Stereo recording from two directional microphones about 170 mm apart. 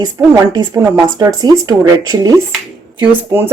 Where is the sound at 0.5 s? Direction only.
20° right (ahead or behind).